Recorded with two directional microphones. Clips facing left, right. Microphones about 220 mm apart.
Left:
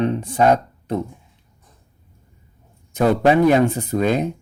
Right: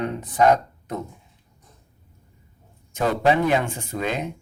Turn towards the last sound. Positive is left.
turn(degrees=40)  # may be behind; listen again after turning